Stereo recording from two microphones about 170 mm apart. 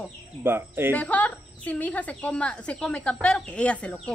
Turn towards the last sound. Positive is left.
turn(degrees=5)  # may be behind; listen again after turning